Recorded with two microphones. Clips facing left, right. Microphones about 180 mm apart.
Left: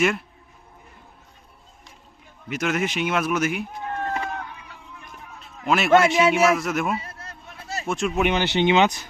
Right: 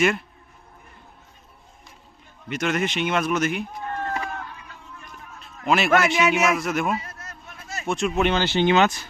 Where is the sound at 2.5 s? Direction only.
5° left (ahead or behind).